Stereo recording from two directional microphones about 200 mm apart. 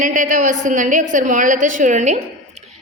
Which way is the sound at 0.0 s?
40° right (ahead or behind).